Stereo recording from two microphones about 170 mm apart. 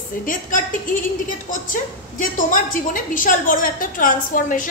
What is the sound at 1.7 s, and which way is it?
A woman's voice, 50° left (ahead or behind).